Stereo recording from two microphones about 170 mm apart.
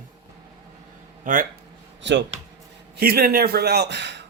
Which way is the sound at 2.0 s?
90° right.